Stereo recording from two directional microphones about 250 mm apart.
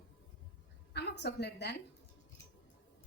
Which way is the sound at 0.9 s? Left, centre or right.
Left.